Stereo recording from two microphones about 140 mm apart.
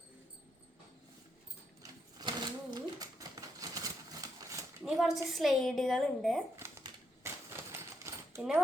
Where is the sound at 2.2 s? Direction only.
30° right (ahead or behind).